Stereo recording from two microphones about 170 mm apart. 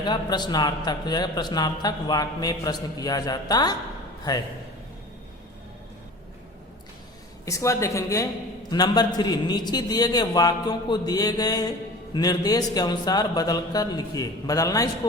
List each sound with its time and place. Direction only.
0.0 s a man's voice: 25° left (ahead or behind)
7.4 s a man's voice: 20° left (ahead or behind)